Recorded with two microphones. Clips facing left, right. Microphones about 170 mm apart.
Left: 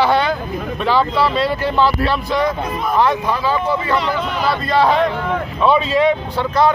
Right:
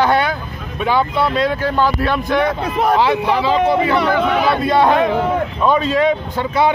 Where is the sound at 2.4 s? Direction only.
75° right (ahead or behind).